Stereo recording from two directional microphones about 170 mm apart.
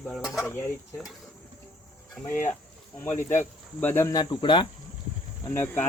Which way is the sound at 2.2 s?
15° left (ahead or behind).